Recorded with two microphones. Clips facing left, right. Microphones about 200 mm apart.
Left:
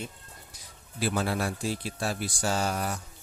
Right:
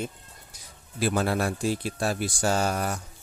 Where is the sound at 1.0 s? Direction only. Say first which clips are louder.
Right 3 dB; 50° right (ahead or behind).